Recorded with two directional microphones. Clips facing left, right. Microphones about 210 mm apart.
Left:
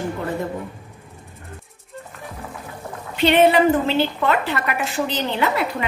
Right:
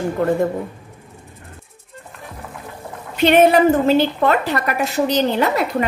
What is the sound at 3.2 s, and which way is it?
A woman's voice, 45° right (ahead or behind).